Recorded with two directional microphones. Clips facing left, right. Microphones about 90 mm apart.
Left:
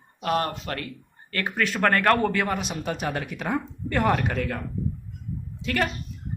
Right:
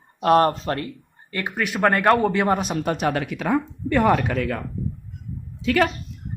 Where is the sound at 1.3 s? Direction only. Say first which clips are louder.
Right 1 dB; 15° right (ahead or behind).